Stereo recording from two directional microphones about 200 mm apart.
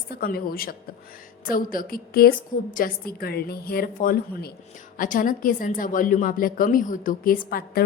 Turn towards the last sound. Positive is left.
turn(degrees=50)  # may be behind; listen again after turning